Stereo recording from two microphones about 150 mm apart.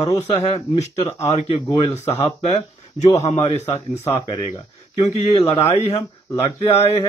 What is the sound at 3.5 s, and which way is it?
Speech, 50° left (ahead or behind).